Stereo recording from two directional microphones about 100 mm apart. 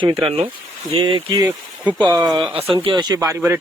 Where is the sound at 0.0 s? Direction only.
70° right (ahead or behind).